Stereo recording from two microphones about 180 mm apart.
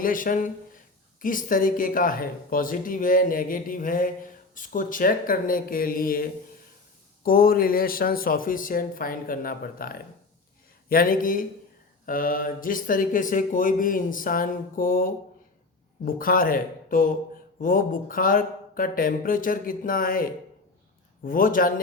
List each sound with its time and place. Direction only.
0.0 s speech: 50° left (ahead or behind)
7.3 s speech: 55° left (ahead or behind)
21.2 s speech: 50° left (ahead or behind)